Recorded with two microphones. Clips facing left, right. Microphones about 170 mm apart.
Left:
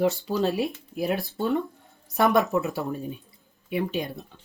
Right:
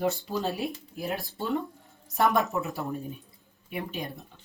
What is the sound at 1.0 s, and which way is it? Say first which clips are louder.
Speech: left 7 dB; 70° left (ahead or behind).